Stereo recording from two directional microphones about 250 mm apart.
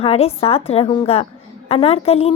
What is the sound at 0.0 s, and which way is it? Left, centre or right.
A woman's voice, left.